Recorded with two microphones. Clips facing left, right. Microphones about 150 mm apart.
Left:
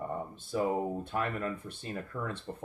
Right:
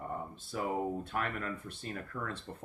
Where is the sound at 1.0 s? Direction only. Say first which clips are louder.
Left 3 dB; 25° left (ahead or behind).